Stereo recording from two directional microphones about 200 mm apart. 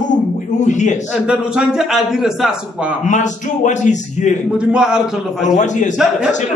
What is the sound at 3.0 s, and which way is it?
A man's voice, 40° left (ahead or behind).